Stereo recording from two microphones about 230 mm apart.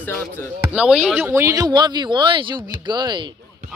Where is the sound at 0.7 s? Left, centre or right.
Centre.